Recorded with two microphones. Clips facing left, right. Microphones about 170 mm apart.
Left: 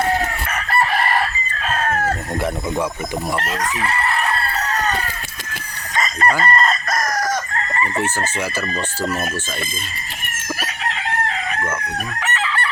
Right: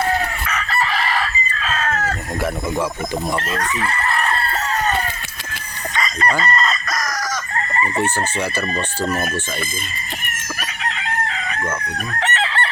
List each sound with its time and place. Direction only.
0.5 s chicken: 50° left (ahead or behind)
3.5 s speech: centre (ahead or behind)
6.0 s chicken: 45° left (ahead or behind)
8.5 s speech: 15° right (ahead or behind)